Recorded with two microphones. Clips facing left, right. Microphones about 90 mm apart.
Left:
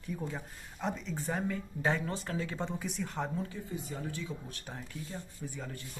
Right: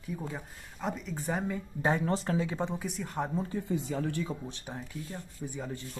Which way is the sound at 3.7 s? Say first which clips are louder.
Right 10 dB; 90° right.